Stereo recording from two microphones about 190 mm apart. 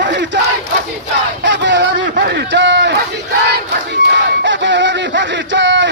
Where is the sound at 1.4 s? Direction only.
70° right (ahead or behind).